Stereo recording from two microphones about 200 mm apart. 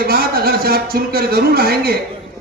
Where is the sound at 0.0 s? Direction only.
50° right (ahead or behind).